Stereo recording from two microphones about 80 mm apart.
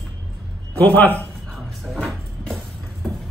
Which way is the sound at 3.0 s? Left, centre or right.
Centre.